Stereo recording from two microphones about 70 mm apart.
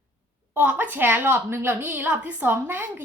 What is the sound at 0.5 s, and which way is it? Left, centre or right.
A woman's voice, right.